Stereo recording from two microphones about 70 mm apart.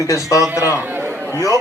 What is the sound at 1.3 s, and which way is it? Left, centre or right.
Speech, left.